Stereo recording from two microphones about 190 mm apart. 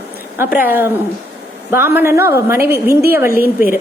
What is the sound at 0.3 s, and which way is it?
A woman's voice, 10° right (ahead or behind).